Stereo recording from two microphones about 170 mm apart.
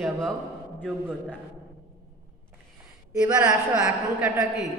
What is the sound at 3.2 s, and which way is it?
A man's voice, 5° right (ahead or behind).